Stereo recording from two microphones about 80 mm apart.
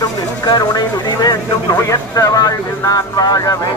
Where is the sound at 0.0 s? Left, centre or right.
Left.